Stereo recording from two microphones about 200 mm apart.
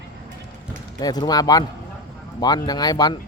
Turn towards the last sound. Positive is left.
turn(degrees=20)  # may be behind; listen again after turning